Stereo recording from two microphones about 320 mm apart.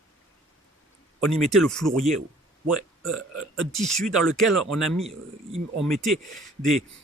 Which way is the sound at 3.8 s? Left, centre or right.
Centre.